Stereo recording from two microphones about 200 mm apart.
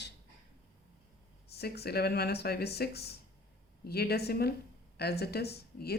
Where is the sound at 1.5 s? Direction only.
55° left (ahead or behind).